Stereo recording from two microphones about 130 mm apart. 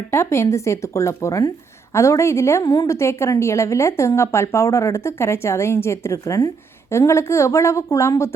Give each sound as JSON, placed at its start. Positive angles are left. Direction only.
{"t": 0.1, "sound": "speech", "side_deg": 20}